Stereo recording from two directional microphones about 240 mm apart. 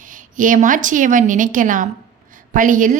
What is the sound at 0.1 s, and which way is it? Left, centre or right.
A woman's voice, right.